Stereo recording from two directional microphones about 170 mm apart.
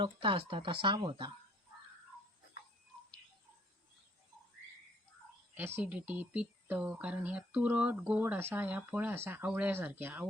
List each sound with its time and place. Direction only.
0.0 s speech: 30° right (ahead or behind)
5.5 s speech: 10° right (ahead or behind)